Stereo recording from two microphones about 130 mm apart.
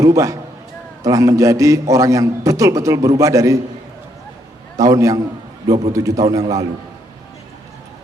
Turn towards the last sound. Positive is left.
turn(degrees=-25)  # may be behind; listen again after turning